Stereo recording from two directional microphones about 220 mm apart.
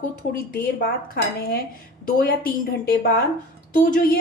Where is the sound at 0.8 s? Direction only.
45° left (ahead or behind).